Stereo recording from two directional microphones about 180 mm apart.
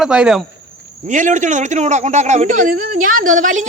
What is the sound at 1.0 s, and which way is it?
A man's voice, 45° right (ahead or behind).